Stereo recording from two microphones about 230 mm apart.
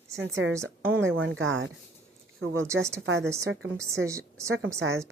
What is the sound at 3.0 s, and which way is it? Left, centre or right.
Speech, right.